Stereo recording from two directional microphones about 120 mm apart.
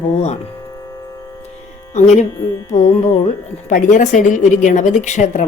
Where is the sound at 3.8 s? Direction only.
90° left.